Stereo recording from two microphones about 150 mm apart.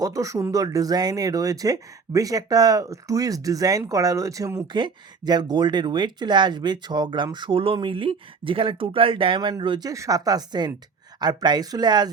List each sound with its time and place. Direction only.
0.0 s speech: 20° right (ahead or behind)